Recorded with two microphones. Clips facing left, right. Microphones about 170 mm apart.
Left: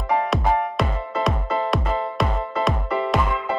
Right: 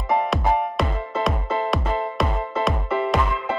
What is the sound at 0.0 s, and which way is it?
Music, centre (ahead or behind).